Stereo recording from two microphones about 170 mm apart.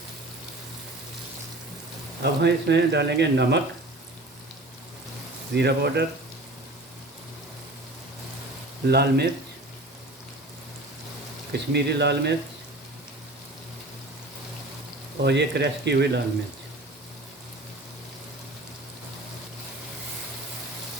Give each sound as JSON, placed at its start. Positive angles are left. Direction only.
{"t": 2.2, "sound": "speech", "side_deg": -80}
{"t": 5.5, "sound": "speech", "side_deg": -75}
{"t": 8.9, "sound": "speech", "side_deg": -70}
{"t": 11.5, "sound": "speech", "side_deg": -80}
{"t": 15.2, "sound": "speech", "side_deg": -90}